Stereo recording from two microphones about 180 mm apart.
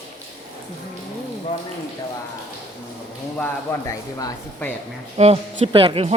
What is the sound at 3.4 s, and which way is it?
Speech, 15° left (ahead or behind).